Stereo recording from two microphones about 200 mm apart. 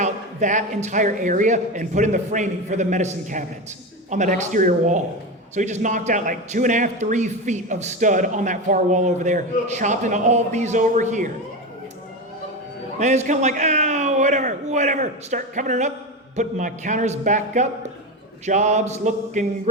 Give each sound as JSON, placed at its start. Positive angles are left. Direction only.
{"t": 0.0, "sound": "a man's voice", "side_deg": -40}
{"t": 13.0, "sound": "a man's voice", "side_deg": -35}